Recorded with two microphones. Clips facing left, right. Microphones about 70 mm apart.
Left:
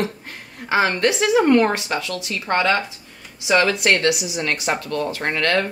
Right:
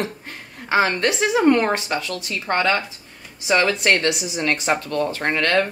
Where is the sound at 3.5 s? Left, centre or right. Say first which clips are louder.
Left 1 dB; right.